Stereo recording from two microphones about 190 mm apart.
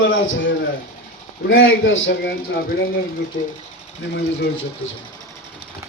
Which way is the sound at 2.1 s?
55° left (ahead or behind).